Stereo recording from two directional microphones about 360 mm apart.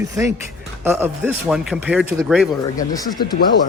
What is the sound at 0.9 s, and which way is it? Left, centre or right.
Speech, centre.